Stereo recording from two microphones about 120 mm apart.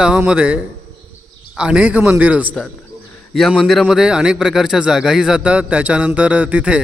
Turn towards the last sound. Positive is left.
turn(degrees=-10)  # may be behind; listen again after turning